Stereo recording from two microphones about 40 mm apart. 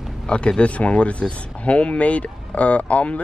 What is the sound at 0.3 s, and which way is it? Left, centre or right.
Speech, left.